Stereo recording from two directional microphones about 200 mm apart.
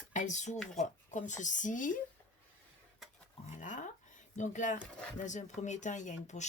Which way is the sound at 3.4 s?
40° left (ahead or behind).